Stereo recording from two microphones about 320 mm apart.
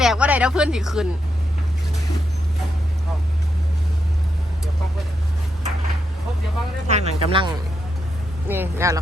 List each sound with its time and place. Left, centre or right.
0.0 s speech: centre
6.8 s a sound: right
8.4 s speech: centre